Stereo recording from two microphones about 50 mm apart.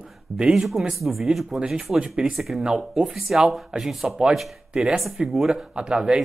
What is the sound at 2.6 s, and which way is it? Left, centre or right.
Speech, centre.